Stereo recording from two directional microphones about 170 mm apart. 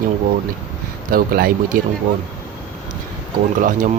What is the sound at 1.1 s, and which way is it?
Speech, 60° right (ahead or behind).